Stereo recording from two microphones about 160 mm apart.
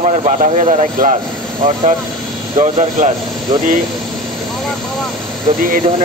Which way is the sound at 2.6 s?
50° right (ahead or behind).